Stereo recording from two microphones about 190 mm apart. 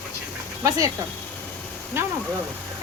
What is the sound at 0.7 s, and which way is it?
Speech, 20° right (ahead or behind).